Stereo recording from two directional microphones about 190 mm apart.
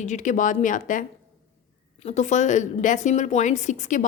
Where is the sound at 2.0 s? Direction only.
40° left (ahead or behind).